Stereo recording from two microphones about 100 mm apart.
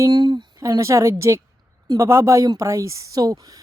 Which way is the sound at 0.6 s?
30° right (ahead or behind).